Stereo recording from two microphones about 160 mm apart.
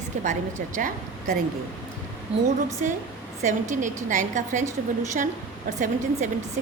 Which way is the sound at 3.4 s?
50° right (ahead or behind).